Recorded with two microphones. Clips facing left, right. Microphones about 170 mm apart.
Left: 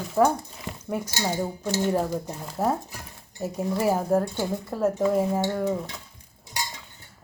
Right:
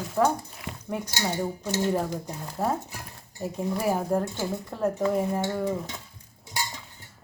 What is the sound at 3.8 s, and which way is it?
Speech, 5° left (ahead or behind).